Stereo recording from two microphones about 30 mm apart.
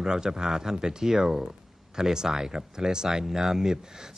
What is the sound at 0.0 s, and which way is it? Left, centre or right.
Speech, right.